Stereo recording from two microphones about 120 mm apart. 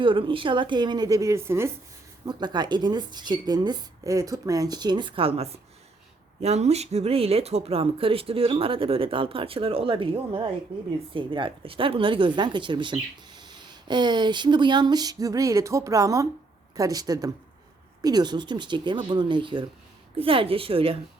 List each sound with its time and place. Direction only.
0.0 s speech: 45° right (ahead or behind); by 1.7 s 20° right (ahead or behind)
2.2 s speech: 35° right (ahead or behind)